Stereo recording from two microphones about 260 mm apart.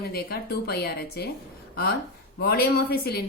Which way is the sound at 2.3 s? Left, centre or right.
Left.